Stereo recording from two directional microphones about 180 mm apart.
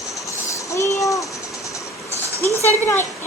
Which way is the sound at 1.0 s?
15° left (ahead or behind).